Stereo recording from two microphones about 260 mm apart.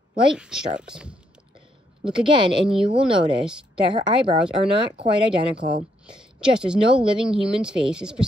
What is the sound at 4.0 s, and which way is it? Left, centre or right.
Speech, centre.